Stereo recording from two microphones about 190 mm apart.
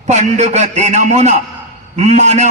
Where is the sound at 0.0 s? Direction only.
40° right (ahead or behind).